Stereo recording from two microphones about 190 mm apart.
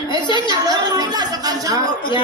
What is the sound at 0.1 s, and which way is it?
Speech, 25° left (ahead or behind).